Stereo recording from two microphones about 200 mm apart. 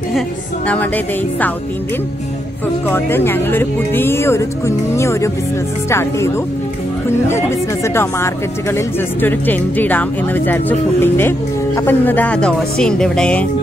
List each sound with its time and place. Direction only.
0.7 s speech: 10° left (ahead or behind)
2.9 s speech: 10° left (ahead or behind)